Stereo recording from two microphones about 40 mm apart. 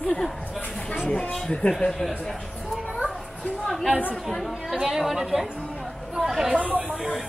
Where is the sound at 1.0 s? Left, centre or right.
Left.